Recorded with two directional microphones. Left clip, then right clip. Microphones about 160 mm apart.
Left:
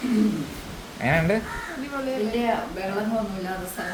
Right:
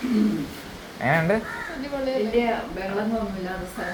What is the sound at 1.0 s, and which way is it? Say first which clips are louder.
Speech: right 1 dB; 20° left (ahead or behind).